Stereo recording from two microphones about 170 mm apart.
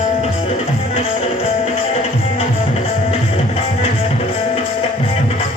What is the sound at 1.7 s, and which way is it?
Music, 35° left (ahead or behind).